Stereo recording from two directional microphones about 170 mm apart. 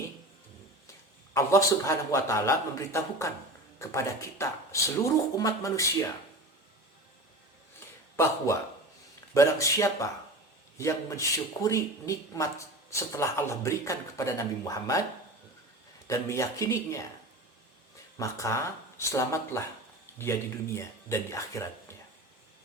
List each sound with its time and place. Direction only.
1.3 s speech: 15° left (ahead or behind)
8.1 s speech: 15° left (ahead or behind)
16.0 s speech: 20° left (ahead or behind)
18.2 s speech: 15° left (ahead or behind)
20.7 s speech: 15° left (ahead or behind)